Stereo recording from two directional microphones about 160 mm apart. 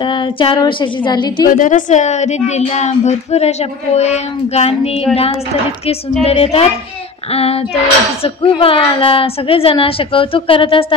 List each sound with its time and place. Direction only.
0.0 s a woman's voice: 30° left (ahead or behind)
1.6 s speech: 50° left (ahead or behind)
6.2 s a woman's voice: 40° left (ahead or behind)